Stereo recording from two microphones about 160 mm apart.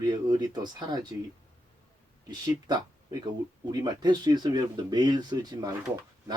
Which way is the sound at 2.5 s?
25° right (ahead or behind).